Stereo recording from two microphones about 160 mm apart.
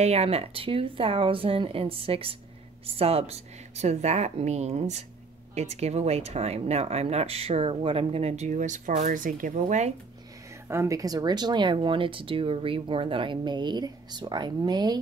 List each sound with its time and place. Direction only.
0.0 s speech: 40° right (ahead or behind)
10.7 s speech: 20° right (ahead or behind)